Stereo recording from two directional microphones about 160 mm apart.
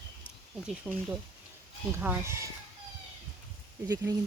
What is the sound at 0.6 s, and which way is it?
Speech, 5° right (ahead or behind).